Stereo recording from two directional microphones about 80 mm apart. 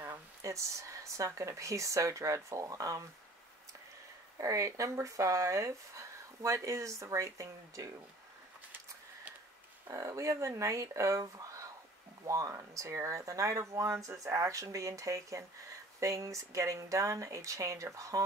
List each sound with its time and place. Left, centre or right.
0.0 s speech: right
4.4 s speech: right
9.8 s speech: right